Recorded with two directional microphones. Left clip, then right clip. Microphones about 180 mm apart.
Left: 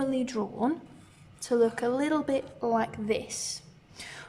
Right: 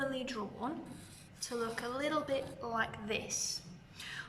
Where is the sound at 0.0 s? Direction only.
30° left (ahead or behind).